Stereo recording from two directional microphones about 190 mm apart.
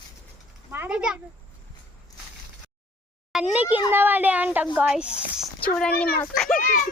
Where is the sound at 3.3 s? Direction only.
5° right (ahead or behind).